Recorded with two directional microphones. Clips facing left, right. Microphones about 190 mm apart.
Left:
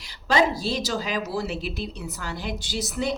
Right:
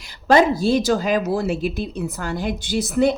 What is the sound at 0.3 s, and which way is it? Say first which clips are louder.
A woman's voice: right 7 dB; 50° right (ahead or behind).